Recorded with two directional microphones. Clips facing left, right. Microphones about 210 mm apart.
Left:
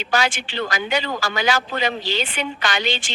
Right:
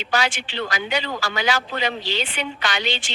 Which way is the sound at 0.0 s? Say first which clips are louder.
Left 2 dB; 45° left (ahead or behind).